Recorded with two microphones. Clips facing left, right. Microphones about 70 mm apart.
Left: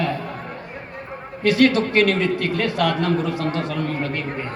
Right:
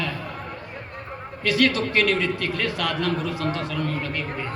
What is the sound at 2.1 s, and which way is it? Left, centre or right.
A man's voice, left.